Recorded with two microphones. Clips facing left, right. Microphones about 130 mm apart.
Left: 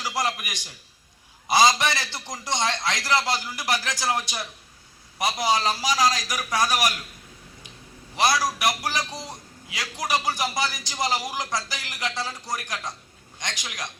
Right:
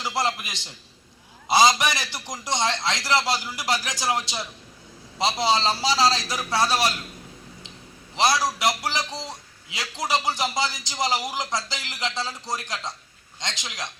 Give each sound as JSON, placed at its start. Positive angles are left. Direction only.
{"t": 0.0, "sound": "a man's voice", "side_deg": -25}
{"t": 8.1, "sound": "a man's voice", "side_deg": -20}